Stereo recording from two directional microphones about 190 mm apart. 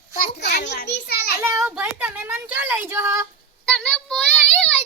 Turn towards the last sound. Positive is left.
turn(degrees=5)  # may be behind; listen again after turning